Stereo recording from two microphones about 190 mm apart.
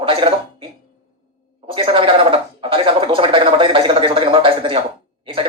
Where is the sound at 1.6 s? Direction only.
25° right (ahead or behind).